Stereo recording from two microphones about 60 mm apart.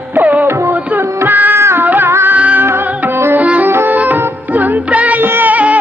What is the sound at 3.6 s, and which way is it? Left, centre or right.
Music, right.